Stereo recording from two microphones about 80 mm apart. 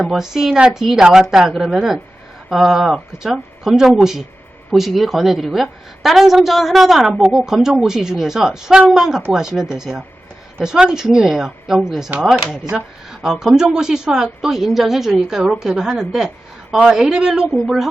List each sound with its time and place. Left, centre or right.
0.0 s a woman's voice: centre